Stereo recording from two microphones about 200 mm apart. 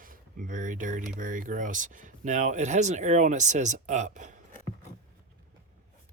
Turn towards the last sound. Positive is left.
turn(degrees=-40)  # may be behind; listen again after turning